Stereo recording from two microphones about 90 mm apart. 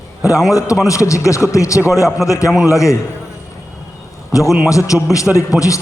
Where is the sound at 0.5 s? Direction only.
40° left (ahead or behind).